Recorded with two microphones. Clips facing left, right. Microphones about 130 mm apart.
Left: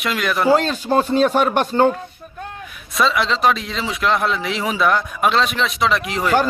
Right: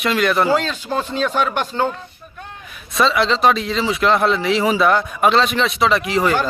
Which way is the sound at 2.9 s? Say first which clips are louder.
Right 2 dB; centre (ahead or behind).